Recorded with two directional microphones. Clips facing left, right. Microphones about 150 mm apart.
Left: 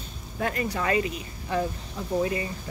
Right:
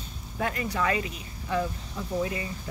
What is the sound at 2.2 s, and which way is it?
Speech, 30° left (ahead or behind).